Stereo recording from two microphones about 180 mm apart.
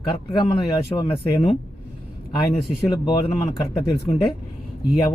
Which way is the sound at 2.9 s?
30° left (ahead or behind).